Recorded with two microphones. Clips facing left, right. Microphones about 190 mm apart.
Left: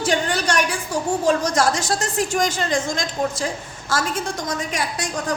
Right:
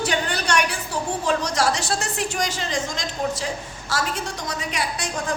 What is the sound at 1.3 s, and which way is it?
A woman's voice, 50° left (ahead or behind).